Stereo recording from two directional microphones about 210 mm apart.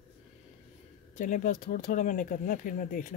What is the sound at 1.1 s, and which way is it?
Speech, 40° left (ahead or behind).